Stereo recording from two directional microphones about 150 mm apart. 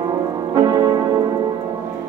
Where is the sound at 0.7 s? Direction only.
25° right (ahead or behind).